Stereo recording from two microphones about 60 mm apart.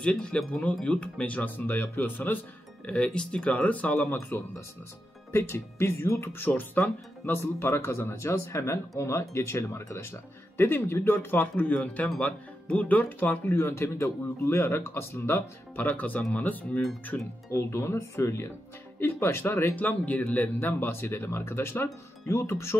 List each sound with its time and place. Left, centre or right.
0.0 s speech: centre
1.7 s speech: left
2.9 s speech: centre
4.1 s speech: left
6.3 s speech: left
7.5 s speech: left
13.8 s speech: left
15.7 s speech: left
17.5 s speech: left
18.9 s speech: left
20.6 s speech: left